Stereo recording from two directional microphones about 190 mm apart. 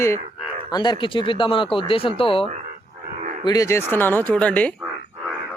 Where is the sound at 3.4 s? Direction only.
15° left (ahead or behind).